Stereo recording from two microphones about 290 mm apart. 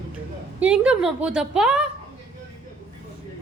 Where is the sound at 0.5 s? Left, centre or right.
Centre.